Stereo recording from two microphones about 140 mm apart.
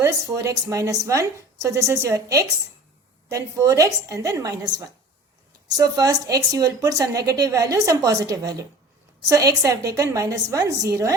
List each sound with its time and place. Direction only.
0.0 s speech: 25° right (ahead or behind)